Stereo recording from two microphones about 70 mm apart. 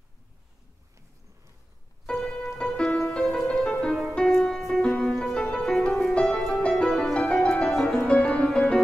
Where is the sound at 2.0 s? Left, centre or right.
Centre.